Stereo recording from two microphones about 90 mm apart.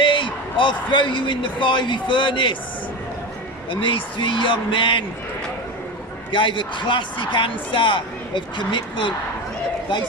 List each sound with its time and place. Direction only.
0.0 s a man's voice: 65° left (ahead or behind)
3.7 s speech: 70° left (ahead or behind)
6.3 s speech: 65° left (ahead or behind)